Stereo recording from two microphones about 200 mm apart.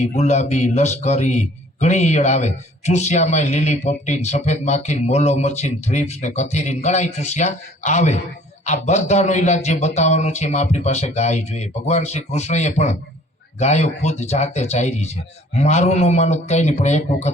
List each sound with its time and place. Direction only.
0.0 s a man's voice: 35° left (ahead or behind)